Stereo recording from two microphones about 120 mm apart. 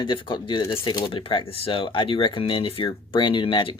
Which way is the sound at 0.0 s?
40° left (ahead or behind).